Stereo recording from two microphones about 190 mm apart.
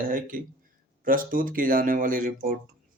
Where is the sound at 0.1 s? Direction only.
45° right (ahead or behind).